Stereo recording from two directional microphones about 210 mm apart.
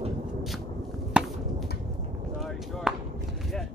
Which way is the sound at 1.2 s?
5° right (ahead or behind).